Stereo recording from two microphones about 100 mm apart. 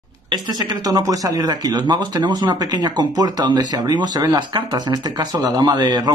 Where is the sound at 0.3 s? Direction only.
45° right (ahead or behind).